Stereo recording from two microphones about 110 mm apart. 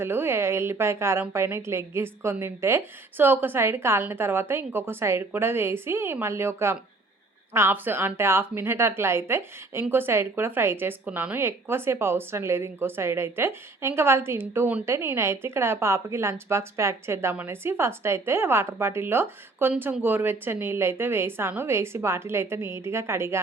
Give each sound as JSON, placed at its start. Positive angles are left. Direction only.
{"t": 0.0, "sound": "a woman's voice", "side_deg": -20}